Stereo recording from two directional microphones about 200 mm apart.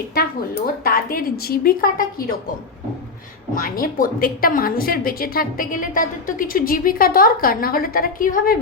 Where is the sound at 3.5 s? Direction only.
45° left (ahead or behind).